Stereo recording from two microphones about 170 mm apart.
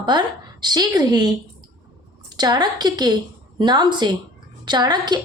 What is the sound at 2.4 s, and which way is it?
A woman's voice, 25° right (ahead or behind).